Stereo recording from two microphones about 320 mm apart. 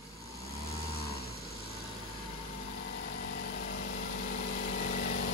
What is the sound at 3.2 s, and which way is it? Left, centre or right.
Vehicle, left.